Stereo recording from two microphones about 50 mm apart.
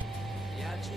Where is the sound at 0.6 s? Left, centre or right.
Centre.